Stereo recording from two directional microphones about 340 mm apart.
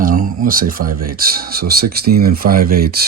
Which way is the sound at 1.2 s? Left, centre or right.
Right.